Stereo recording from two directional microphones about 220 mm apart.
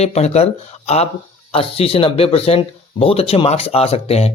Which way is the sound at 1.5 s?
25° left (ahead or behind).